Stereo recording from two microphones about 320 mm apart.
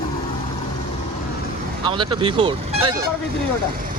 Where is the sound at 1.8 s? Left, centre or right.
Centre.